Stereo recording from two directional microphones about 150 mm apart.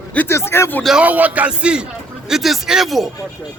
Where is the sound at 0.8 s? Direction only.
5° right (ahead or behind).